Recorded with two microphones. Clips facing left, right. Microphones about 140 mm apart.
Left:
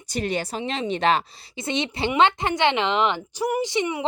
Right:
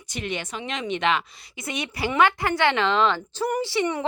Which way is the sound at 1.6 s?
25° left (ahead or behind).